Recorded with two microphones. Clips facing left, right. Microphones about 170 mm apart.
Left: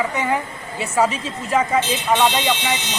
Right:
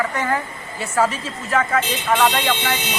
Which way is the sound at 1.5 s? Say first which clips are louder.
Left 1 dB; 20° left (ahead or behind).